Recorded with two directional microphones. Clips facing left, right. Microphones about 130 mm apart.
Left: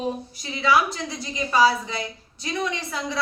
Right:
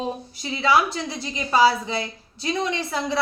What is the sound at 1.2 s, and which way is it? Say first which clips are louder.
A woman's voice: right 1 dB; 30° right (ahead or behind).